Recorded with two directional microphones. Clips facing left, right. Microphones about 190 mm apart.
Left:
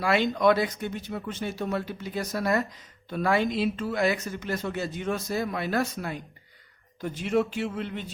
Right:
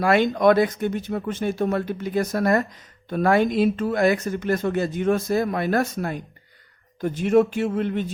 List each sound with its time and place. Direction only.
0.0 s speech: 50° right (ahead or behind)